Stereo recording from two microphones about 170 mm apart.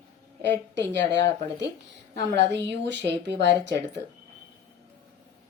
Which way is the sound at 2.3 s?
90° right.